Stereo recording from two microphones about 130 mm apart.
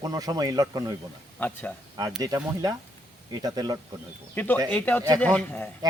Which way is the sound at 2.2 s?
30° right (ahead or behind).